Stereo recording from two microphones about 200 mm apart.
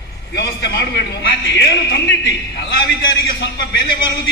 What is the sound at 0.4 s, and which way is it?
A man's voice, 55° left (ahead or behind).